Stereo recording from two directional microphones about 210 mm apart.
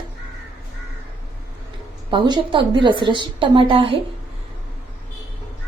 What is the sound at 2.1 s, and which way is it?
A woman's voice, 25° right (ahead or behind).